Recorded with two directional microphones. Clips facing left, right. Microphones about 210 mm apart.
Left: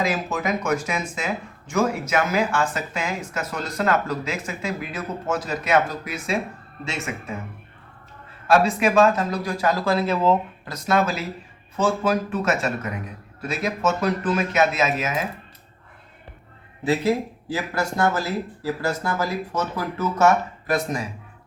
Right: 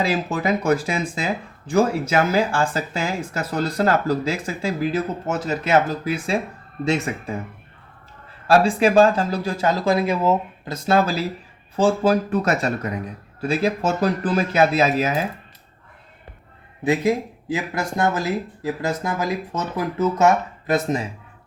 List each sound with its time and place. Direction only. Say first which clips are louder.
0.0 s speech: right 2 dB; 30° right (ahead or behind)
8.4 s speech: right 2 dB; 30° right (ahead or behind); by 10.3 s 10° right (ahead or behind)
10.7 s speech: right 3 dB; 30° right (ahead or behind)
16.8 s speech: right 1 dB; 15° right (ahead or behind)